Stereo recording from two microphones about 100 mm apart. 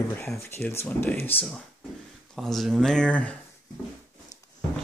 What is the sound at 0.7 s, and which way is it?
Speech, 20° left (ahead or behind).